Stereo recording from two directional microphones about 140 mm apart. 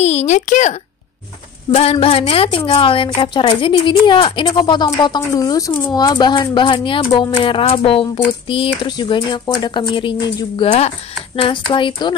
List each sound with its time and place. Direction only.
0.0 s a woman's voice: 50° left (ahead or behind)
1.7 s a woman's voice: 45° left (ahead or behind)